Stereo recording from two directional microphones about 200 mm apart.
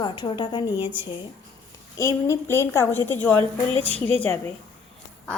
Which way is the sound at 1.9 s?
15° left (ahead or behind).